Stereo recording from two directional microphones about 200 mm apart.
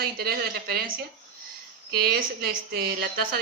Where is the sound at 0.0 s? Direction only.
50° right (ahead or behind).